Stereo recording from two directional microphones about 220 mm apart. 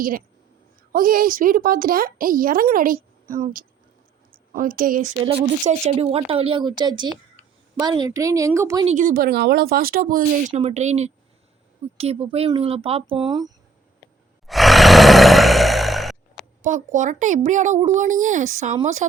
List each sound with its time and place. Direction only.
0.9 s a woman's voice: 40° right (ahead or behind)
5.2 s speech: 30° right (ahead or behind)
8.9 s speech: 35° right (ahead or behind)
10.5 s speech: 30° right (ahead or behind)
14.4 s roar: centre (ahead or behind)
16.6 s speech: 35° right (ahead or behind)